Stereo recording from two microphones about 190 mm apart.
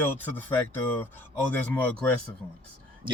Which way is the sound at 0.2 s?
10° left (ahead or behind).